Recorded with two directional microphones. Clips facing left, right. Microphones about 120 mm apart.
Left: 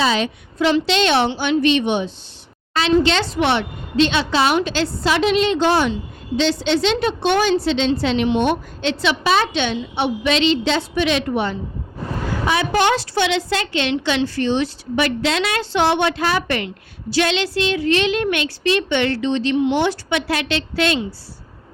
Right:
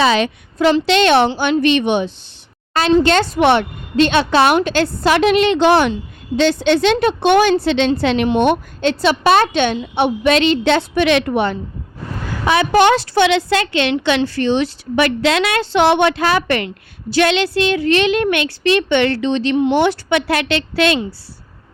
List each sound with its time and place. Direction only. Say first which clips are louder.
0.0 s a woman's voice: right 4 dB; 70° right (ahead or behind)
0.6 s a woman's voice: right 4 dB; 50° right (ahead or behind)
2.7 s a woman's voice: right 3 dB; 50° right (ahead or behind); by 5.9 s 70° right (ahead or behind)
6.3 s a woman's voice: right 4 dB; 50° right (ahead or behind)
8.8 s a woman's voice: right 6 dB; 45° right (ahead or behind); by 19.5 s 70° right (ahead or behind)
19.5 s a woman's voice: right 4 dB; 50° right (ahead or behind)
19.8 s a woman's voice: right 4 dB; 60° right (ahead or behind)